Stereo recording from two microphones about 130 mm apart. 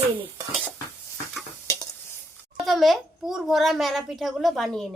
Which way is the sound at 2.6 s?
Centre (ahead or behind).